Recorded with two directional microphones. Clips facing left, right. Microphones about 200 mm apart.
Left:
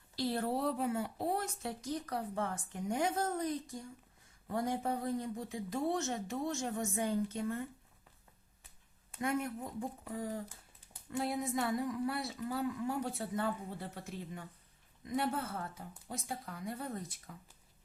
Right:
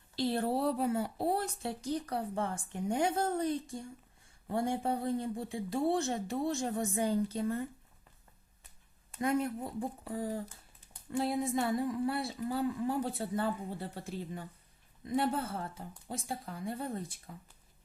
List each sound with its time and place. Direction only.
0.2 s speech: 30° right (ahead or behind)
9.1 s speech: 35° right (ahead or behind)